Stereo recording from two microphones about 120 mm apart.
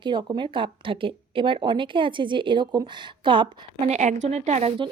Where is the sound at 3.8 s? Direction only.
70° right (ahead or behind).